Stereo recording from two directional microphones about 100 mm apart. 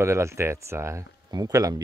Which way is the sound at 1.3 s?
40° right (ahead or behind).